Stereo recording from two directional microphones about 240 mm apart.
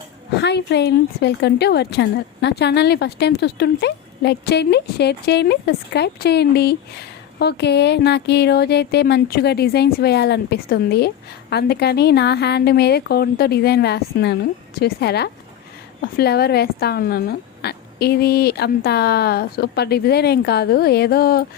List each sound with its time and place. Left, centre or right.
0.3 s a woman's voice: left